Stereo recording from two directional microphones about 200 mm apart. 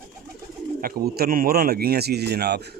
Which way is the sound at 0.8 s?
50° right (ahead or behind).